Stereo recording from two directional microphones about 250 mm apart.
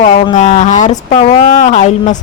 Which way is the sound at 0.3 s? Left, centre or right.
Left.